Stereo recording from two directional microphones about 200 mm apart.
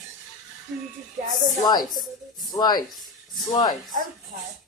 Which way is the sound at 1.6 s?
20° left (ahead or behind).